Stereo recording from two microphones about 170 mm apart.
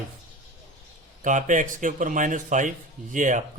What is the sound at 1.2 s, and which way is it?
Speech, 50° right (ahead or behind).